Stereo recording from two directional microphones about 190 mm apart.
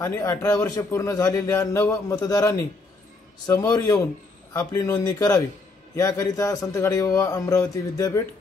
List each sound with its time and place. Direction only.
0.0 s a man's voice: 15° left (ahead or behind)